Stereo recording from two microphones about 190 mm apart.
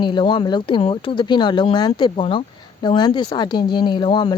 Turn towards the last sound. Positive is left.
turn(degrees=25)  # may be behind; listen again after turning